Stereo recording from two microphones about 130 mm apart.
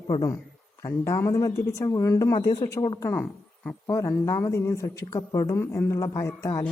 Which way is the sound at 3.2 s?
10° left (ahead or behind).